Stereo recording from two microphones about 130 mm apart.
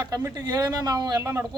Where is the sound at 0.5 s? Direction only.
30° right (ahead or behind).